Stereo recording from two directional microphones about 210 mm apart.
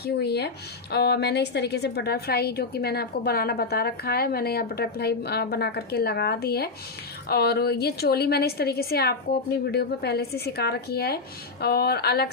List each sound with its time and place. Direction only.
0.0 s speech: 50° left (ahead or behind)